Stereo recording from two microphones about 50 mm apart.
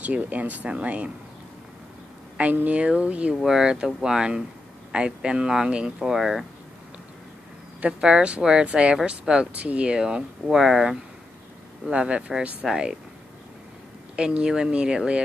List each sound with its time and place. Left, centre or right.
0.0 s speech: right
2.3 s speech: right
3.3 s speech: centre
6.1 s speech: centre
7.8 s speech: centre
11.9 s speech: right
14.1 s speech: right